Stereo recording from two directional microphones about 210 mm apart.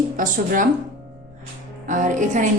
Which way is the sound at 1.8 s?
35° right (ahead or behind).